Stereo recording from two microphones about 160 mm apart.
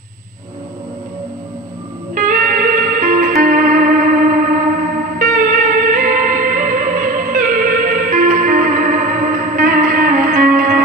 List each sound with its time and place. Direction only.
2.1 s music: 60° right (ahead or behind)